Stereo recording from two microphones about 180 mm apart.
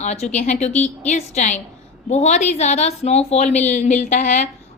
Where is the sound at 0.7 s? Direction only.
5° left (ahead or behind).